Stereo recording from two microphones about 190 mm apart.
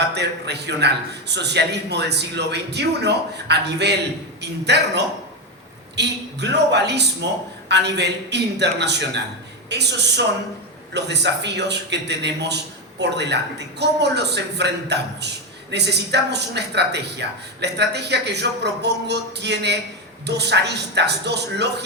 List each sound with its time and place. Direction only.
0.1 s a man's voice: 60° right (ahead or behind)